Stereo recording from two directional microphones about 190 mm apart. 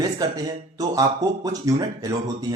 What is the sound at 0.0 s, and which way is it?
Speech, 20° right (ahead or behind).